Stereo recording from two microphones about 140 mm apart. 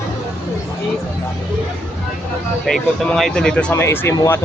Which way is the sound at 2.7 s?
5° left (ahead or behind).